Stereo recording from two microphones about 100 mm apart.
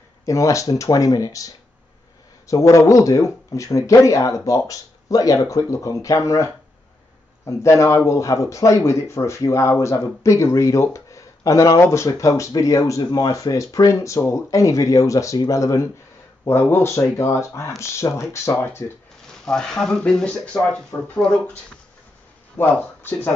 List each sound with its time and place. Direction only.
0.2 s speech: 30° left (ahead or behind)
19.4 s speech: 5° left (ahead or behind)
22.6 s speech: 20° left (ahead or behind)